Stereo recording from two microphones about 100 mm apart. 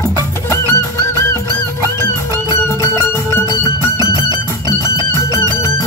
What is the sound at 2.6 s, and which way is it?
Music, 25° left (ahead or behind).